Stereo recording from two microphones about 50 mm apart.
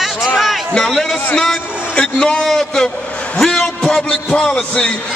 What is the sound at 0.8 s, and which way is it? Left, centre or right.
Speech, centre.